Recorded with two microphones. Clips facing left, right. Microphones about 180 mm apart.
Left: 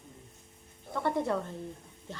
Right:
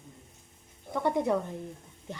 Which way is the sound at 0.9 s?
15° right (ahead or behind).